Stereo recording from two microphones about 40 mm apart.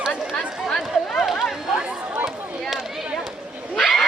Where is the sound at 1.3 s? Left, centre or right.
Centre.